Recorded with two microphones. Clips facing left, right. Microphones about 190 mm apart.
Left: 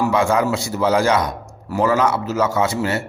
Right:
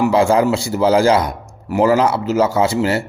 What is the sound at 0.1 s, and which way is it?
A man's voice, 30° right (ahead or behind).